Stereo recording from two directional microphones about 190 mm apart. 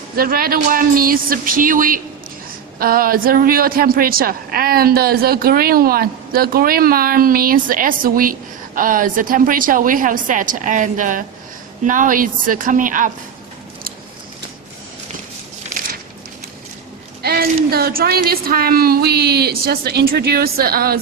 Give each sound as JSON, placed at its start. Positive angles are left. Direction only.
{"t": 0.2, "sound": "a woman's voice", "side_deg": -50}
{"t": 17.2, "sound": "a woman's voice", "side_deg": -55}